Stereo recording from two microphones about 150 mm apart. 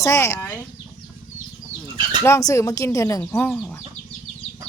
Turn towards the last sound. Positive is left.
turn(degrees=10)  # may be behind; listen again after turning